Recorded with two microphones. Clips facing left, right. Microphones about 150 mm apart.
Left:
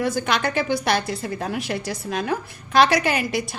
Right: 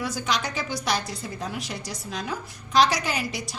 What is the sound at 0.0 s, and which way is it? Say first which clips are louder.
A woman's voice: left 6 dB; 55° left (ahead or behind).